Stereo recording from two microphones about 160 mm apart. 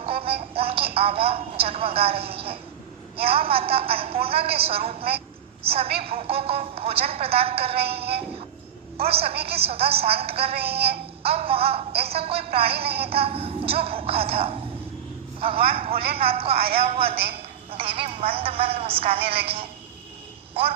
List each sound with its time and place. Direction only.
0.0 s music: 35° right (ahead or behind)
0.9 s a woman's voice: 35° right (ahead or behind)
4.4 s speech: 75° right (ahead or behind)
4.6 s a woman's voice: 35° right (ahead or behind)
7.8 s a sound: 80° right
9.3 s speech: 75° right (ahead or behind)
9.6 s a woman's voice: 35° right (ahead or behind)
10.5 s a sound: 80° right
11.3 s a woman's voice: 35° right (ahead or behind)
11.9 s speech: 75° right (ahead or behind)
12.2 s a woman's voice: 35° right (ahead or behind)
12.6 s speech: 75° right (ahead or behind)
13.1 s a woman's voice: 35° right (ahead or behind)